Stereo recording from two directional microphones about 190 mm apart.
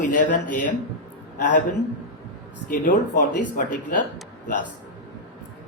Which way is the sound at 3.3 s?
45° left (ahead or behind).